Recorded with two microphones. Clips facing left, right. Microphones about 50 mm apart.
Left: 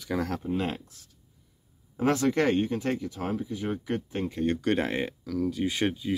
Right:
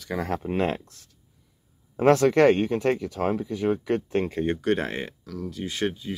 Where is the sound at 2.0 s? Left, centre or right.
Right.